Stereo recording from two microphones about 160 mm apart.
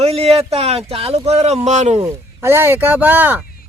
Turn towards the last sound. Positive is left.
turn(degrees=-10)  # may be behind; listen again after turning